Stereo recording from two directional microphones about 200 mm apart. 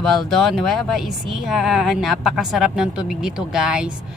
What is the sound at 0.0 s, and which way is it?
Speech, centre (ahead or behind).